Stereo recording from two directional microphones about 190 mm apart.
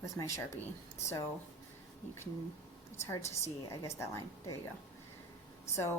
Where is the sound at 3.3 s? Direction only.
15° left (ahead or behind).